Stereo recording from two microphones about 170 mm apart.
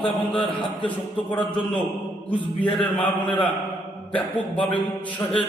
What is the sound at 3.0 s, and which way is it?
Speech, 30° left (ahead or behind).